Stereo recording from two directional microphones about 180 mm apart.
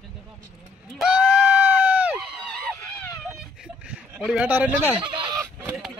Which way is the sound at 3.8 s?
5° right (ahead or behind).